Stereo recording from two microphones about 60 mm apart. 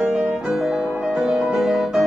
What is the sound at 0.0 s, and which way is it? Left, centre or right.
Music, right.